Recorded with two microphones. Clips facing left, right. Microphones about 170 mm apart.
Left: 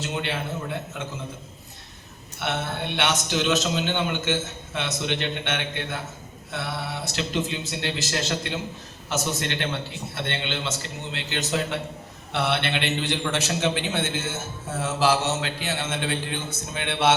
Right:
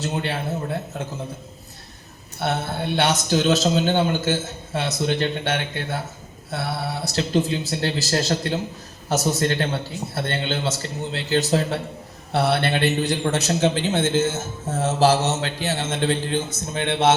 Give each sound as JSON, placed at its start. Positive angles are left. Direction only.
{"t": 0.0, "sound": "a man's voice", "side_deg": -35}
{"t": 2.4, "sound": "a man's voice", "side_deg": -35}